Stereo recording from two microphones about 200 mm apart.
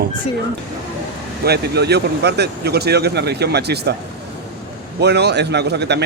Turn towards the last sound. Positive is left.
turn(degrees=-55)  # may be behind; listen again after turning